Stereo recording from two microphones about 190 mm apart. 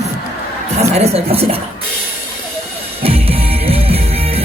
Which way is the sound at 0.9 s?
35° right (ahead or behind).